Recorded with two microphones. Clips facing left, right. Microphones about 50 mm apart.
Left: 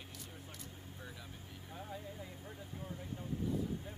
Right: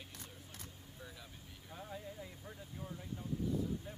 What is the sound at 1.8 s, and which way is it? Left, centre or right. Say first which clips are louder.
Vehicle: even; centre.